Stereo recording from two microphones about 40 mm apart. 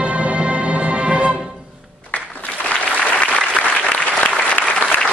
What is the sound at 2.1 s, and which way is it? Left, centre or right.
Applause, left.